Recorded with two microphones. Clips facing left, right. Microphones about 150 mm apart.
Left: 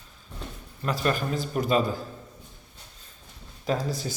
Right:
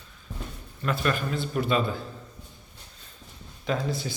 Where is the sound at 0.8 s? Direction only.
35° left (ahead or behind).